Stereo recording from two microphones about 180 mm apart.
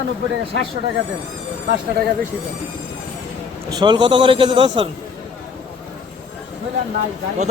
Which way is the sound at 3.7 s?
25° right (ahead or behind).